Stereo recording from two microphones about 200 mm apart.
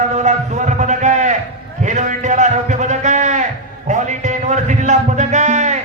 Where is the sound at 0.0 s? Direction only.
35° right (ahead or behind).